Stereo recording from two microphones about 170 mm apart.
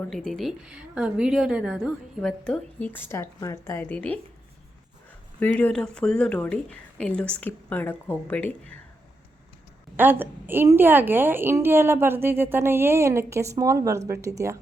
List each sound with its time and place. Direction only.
0.1 s a woman's voice: centre (ahead or behind)
5.5 s speech: 5° left (ahead or behind)
10.0 s a woman's voice: 10° right (ahead or behind)